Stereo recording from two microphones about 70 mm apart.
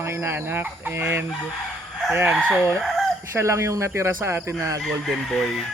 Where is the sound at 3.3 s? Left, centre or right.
Right.